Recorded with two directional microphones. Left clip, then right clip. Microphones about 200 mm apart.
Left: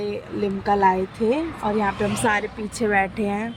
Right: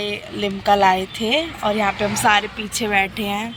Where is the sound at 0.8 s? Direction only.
5° left (ahead or behind).